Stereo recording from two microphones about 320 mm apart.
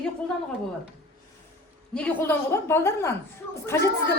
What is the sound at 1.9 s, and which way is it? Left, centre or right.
A woman's voice, centre.